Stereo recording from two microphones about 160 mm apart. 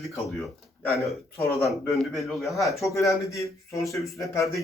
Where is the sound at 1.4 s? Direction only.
20° left (ahead or behind).